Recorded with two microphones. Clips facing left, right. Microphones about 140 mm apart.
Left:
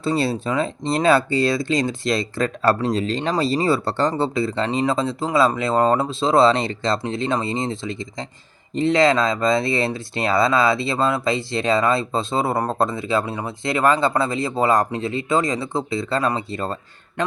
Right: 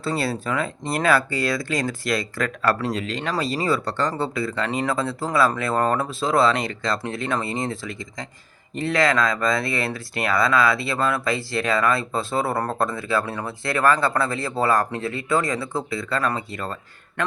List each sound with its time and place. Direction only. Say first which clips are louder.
0.0 s speech: left 4 dB; 20° left (ahead or behind)